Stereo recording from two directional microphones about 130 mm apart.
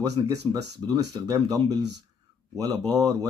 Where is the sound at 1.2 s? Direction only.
25° right (ahead or behind).